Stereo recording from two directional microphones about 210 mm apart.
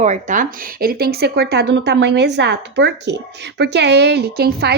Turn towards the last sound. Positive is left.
turn(degrees=-50)  # may be behind; listen again after turning